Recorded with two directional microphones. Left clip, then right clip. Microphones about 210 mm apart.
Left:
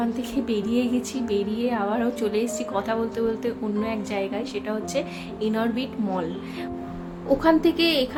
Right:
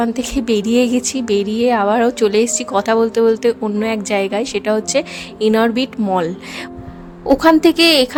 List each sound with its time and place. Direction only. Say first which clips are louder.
0.0 s a woman's voice: right 8 dB; 45° right (ahead or behind)
7.3 s a woman's voice: right 8 dB; 50° right (ahead or behind)